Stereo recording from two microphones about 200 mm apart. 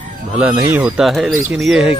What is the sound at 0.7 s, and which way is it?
Speech, 10° right (ahead or behind).